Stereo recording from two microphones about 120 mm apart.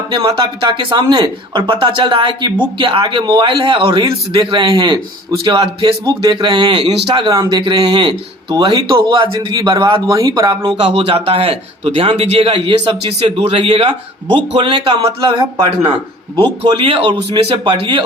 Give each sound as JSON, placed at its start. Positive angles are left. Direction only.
{"t": 0.1, "sound": "a woman's voice", "side_deg": -40}
{"t": 1.0, "sound": "a woman's voice", "side_deg": -35}
{"t": 10.1, "sound": "a woman's voice", "side_deg": -30}
{"t": 16.7, "sound": "a woman's voice", "side_deg": -50}